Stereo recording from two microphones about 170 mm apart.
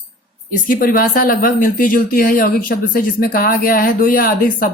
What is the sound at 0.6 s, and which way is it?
Speech, 55° left (ahead or behind).